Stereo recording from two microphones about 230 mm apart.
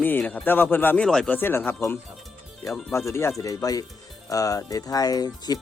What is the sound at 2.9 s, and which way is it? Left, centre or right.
Speech, centre.